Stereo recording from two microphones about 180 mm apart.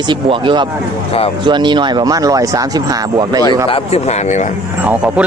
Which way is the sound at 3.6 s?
35° left (ahead or behind).